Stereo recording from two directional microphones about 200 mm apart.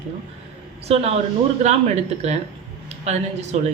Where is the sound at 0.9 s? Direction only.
30° right (ahead or behind).